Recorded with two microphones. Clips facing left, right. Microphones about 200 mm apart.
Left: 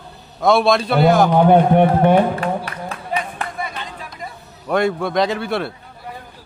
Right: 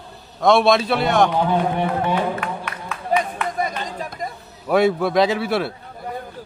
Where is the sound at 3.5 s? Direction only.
40° right (ahead or behind).